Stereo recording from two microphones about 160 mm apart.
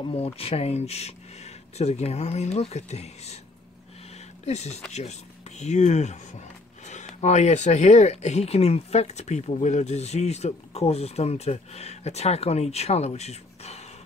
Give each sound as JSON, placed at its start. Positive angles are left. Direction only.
{"t": 0.1, "sound": "speech", "side_deg": 40}
{"t": 4.5, "sound": "speech", "side_deg": 45}